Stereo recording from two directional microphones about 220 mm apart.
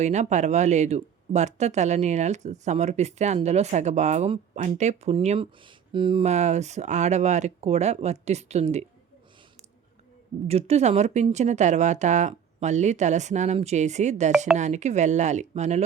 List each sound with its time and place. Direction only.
0.0 s speech: 30° right (ahead or behind)
10.4 s speech: 30° right (ahead or behind)